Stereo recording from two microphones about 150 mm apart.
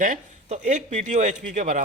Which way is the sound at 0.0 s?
55° right (ahead or behind).